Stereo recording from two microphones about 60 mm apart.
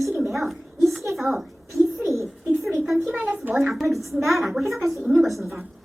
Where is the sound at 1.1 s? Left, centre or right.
Centre.